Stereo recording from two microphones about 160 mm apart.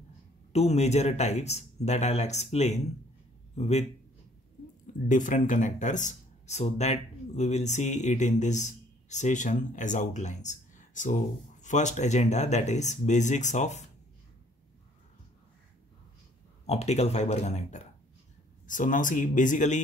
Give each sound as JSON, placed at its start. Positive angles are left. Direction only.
{"t": 0.5, "sound": "speech", "side_deg": 45}
{"t": 5.0, "sound": "speech", "side_deg": 50}
{"t": 16.6, "sound": "speech", "side_deg": 45}